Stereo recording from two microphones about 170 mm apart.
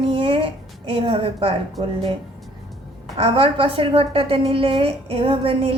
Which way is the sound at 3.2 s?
35° right (ahead or behind).